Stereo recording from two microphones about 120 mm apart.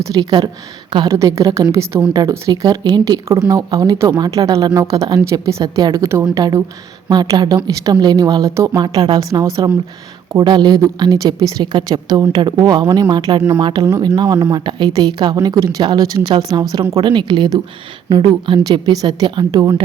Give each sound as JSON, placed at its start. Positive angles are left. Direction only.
{"t": 0.2, "sound": "a woman's voice", "side_deg": -40}
{"t": 1.0, "sound": "a woman's voice", "side_deg": -30}
{"t": 10.3, "sound": "a woman's voice", "side_deg": -35}